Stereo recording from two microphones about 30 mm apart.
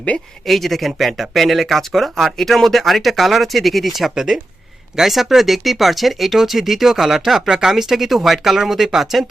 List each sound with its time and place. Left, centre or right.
0.4 s speech: centre
4.1 s speech: centre